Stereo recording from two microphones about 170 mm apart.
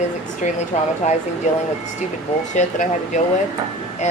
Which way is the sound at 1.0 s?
45° left (ahead or behind).